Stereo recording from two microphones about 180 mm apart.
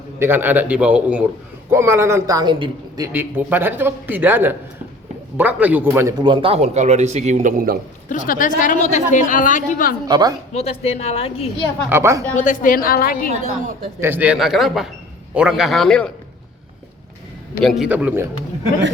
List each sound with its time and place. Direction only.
0.2 s speech: 10° right (ahead or behind)
3.1 s speech: 10° right (ahead or behind); by 7.8 s 50° right (ahead or behind)
8.1 s a woman's voice: 45° left (ahead or behind)
10.1 s a woman's voice: 20° right (ahead or behind)
10.5 s a woman's voice: 35° left (ahead or behind)
11.9 s speech: 15° right (ahead or behind)
12.4 s a woman's voice: 50° left (ahead or behind)
14.0 s speech: 10° right (ahead or behind)
17.6 s speech: centre (ahead or behind)